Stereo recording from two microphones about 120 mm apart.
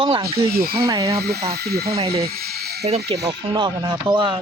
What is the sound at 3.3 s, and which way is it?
Speech, 35° right (ahead or behind).